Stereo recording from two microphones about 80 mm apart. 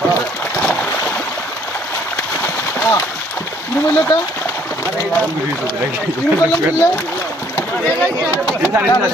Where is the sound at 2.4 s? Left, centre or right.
Left.